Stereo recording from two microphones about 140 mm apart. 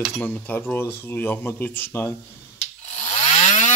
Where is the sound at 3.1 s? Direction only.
50° left (ahead or behind).